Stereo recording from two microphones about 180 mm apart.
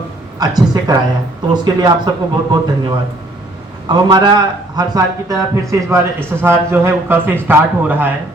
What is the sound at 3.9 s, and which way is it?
A man's voice, 25° right (ahead or behind).